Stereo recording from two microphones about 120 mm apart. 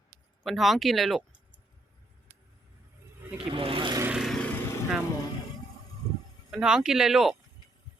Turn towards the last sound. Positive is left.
turn(degrees=0)  # may be behind; listen again after turning